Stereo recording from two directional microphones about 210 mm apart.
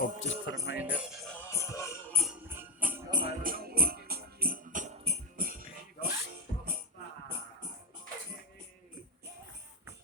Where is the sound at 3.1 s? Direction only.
25° right (ahead or behind).